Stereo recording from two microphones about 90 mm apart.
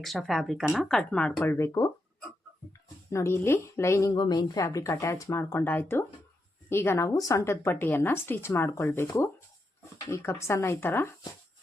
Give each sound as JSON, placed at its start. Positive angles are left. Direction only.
{"t": 0.0, "sound": "speech", "side_deg": 0}
{"t": 1.5, "sound": "speech", "side_deg": 30}
{"t": 3.1, "sound": "speech", "side_deg": 30}
{"t": 4.1, "sound": "speech", "side_deg": 50}
{"t": 7.1, "sound": "speech", "side_deg": 40}